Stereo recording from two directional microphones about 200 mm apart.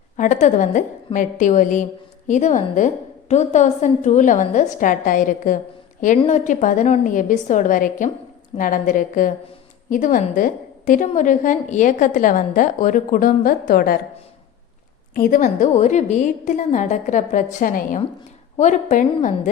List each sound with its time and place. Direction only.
0.2 s a woman's voice: 35° left (ahead or behind)
15.1 s a woman's voice: 45° left (ahead or behind)